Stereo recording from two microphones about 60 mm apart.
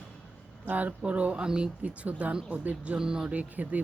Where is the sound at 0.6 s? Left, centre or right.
Right; by 1.7 s centre.